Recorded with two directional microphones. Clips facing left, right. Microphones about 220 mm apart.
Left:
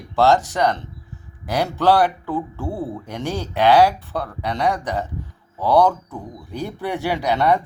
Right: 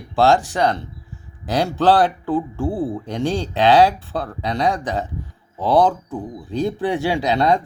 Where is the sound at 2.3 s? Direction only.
15° right (ahead or behind).